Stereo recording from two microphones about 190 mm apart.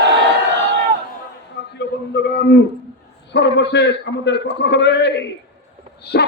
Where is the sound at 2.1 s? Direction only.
60° left (ahead or behind).